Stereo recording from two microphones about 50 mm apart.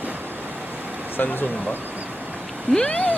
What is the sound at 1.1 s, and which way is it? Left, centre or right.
Speech, left.